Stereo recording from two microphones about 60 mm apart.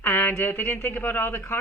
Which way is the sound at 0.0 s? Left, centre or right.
Left.